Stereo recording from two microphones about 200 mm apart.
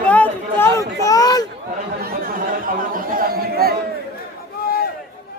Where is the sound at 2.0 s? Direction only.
45° right (ahead or behind).